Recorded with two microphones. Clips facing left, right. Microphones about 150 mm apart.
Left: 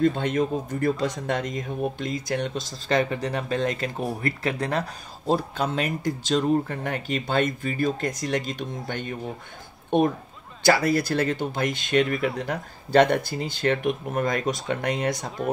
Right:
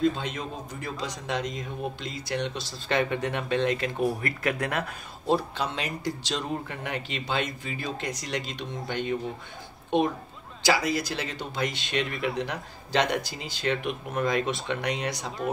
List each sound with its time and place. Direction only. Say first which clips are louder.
0.0 s speech: left 5 dB; 55° left (ahead or behind)